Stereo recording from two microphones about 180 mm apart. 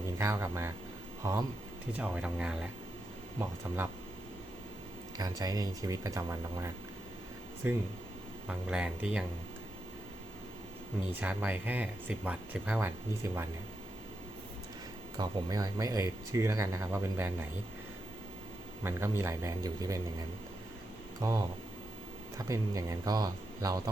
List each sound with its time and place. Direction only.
0.2 s speech: 15° right (ahead or behind)
5.4 s speech: 20° right (ahead or behind)
11.2 s speech: 10° right (ahead or behind)
15.2 s speech: 20° right (ahead or behind)
18.8 s speech: 15° right (ahead or behind)
21.2 s speech: 15° right (ahead or behind)